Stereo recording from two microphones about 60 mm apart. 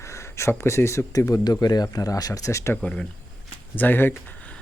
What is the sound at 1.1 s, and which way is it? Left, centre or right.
Speech, left.